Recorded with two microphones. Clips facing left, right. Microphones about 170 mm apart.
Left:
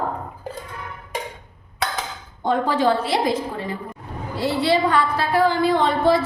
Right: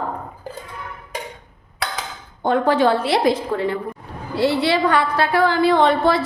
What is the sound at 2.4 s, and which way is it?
A woman's voice, 65° right (ahead or behind).